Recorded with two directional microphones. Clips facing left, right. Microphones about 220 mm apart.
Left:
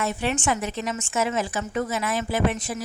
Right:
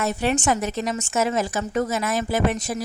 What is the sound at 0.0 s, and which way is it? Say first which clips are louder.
A woman's voice: right 3 dB; 40° right (ahead or behind).